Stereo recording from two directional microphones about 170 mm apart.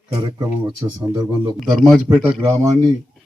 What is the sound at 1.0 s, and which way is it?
Speech, 25° right (ahead or behind).